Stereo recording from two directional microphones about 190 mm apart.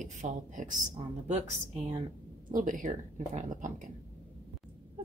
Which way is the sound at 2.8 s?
40° right (ahead or behind).